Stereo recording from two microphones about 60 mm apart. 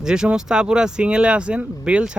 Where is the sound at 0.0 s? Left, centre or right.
Centre.